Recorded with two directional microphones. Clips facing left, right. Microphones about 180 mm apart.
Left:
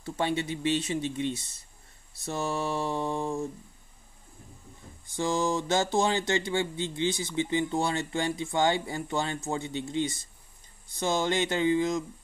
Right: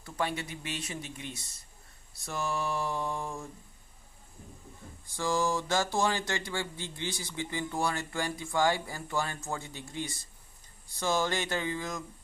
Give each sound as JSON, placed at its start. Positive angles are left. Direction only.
{"t": 0.0, "sound": "speech", "side_deg": 25}
{"t": 5.1, "sound": "speech", "side_deg": 20}